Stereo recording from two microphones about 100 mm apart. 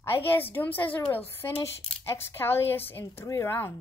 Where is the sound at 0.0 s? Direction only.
20° left (ahead or behind).